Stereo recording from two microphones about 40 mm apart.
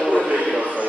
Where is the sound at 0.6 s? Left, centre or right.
Right.